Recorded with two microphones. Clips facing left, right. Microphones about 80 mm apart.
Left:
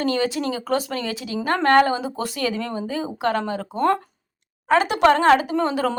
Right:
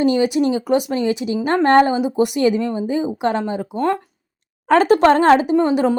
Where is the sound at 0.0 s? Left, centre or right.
Centre.